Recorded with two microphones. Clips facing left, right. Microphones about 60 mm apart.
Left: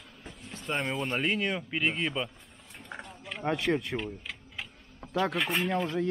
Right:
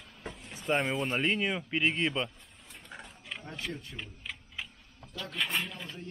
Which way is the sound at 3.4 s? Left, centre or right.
Left.